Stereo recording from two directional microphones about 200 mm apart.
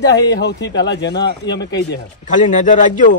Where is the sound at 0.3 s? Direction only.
60° left (ahead or behind).